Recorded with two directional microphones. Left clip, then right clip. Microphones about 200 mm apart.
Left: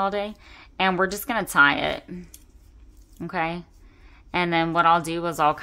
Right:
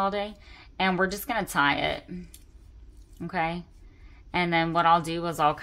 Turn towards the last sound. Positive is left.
turn(degrees=25)  # may be behind; listen again after turning